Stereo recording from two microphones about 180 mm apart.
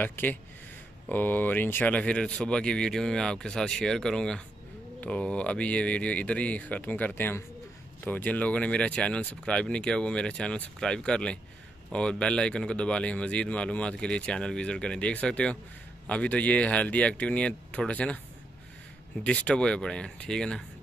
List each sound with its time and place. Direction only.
0.0 s a man's voice: 10° left (ahead or behind)
19.2 s a man's voice: 5° left (ahead or behind)